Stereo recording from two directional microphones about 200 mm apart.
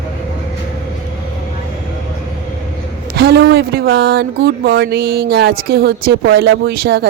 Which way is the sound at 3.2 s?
55° right (ahead or behind).